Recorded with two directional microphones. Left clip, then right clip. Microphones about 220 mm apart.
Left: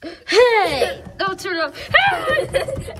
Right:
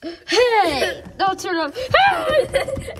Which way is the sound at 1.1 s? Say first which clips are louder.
Right 2 dB; 15° right (ahead or behind).